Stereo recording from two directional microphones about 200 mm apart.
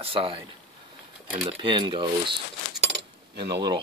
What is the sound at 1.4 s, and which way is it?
Speech, 25° right (ahead or behind).